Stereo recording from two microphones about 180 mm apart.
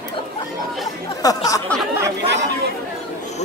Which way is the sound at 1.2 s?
20° left (ahead or behind).